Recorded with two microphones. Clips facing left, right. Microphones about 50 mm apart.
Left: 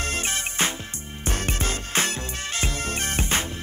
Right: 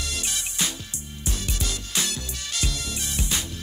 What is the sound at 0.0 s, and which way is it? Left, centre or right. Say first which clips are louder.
Music: left 5 dB; left.